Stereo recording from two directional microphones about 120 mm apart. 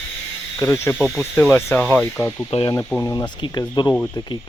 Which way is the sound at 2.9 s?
25° left (ahead or behind).